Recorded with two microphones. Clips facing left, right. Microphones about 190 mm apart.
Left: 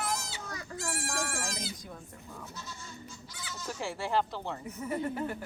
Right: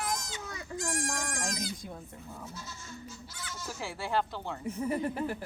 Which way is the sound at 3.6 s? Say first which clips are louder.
Left 3 dB; centre (ahead or behind).